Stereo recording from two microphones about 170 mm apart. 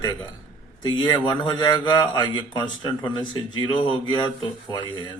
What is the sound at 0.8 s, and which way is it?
A man's voice, 25° left (ahead or behind).